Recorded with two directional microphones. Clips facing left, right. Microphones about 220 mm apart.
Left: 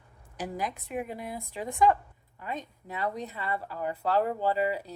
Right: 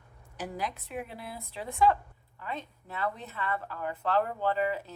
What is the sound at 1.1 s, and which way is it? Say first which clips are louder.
Speech: left 4 dB; 15° left (ahead or behind).